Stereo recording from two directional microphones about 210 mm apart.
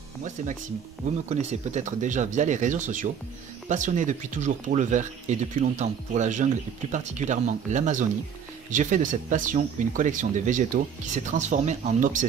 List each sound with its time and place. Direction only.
1.3 s speech: 35° right (ahead or behind)